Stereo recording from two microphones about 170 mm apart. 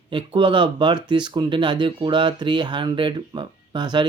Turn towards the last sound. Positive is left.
turn(degrees=-25)  # may be behind; listen again after turning